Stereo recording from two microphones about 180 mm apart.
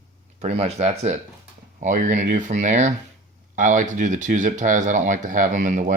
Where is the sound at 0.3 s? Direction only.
35° right (ahead or behind).